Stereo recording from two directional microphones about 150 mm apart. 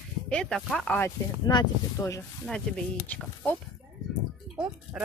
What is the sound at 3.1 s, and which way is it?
Speech, 10° left (ahead or behind).